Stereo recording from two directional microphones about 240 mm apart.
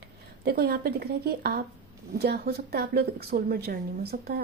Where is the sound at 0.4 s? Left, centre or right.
Right.